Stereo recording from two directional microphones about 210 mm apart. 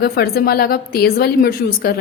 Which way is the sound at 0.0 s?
50° left (ahead or behind).